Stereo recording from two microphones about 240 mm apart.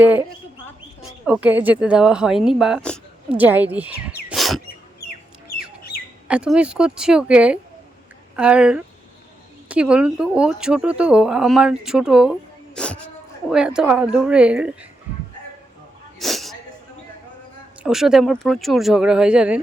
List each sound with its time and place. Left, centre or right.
0.0 s speech: centre
5.5 s bird: left
6.2 s speech: centre
16.1 s a sound: centre
17.8 s speech: centre